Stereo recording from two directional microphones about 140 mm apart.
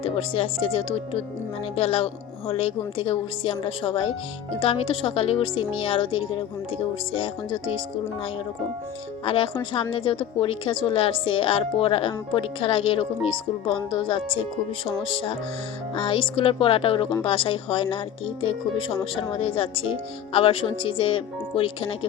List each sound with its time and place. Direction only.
0.0 s a woman's voice: 45° left (ahead or behind)
9.2 s a woman's voice: 40° left (ahead or behind)